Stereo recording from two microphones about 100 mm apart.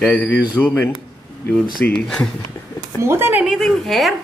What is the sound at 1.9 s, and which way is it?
Speech, 10° left (ahead or behind).